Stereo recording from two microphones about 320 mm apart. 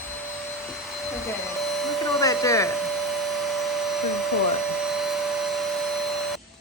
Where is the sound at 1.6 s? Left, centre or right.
Centre.